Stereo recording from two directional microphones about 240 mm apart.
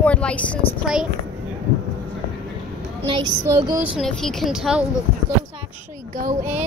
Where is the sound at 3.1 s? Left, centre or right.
Right.